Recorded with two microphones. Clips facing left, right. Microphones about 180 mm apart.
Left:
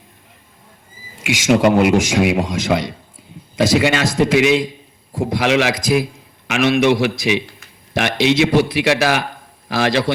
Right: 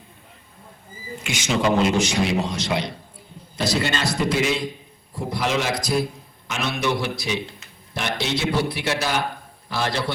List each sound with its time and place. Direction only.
1.2 s a man's voice: 90° left
1.6 s speech: 75° left (ahead or behind); by 2.2 s 90° left
3.5 s a man's voice: 90° left